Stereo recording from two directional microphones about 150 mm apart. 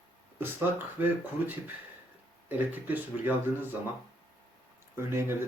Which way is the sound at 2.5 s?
10° right (ahead or behind).